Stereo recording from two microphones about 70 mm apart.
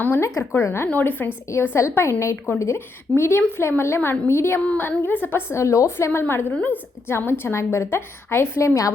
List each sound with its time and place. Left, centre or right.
0.2 s a woman's voice: left
0.9 s speech: left
1.6 s a woman's voice: left
4.8 s a woman's voice: left
5.5 s a woman's voice: left
6.1 s a woman's voice: left
7.1 s a woman's voice: left